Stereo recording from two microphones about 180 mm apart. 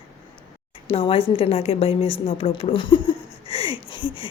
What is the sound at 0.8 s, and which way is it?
A woman's voice, 30° left (ahead or behind).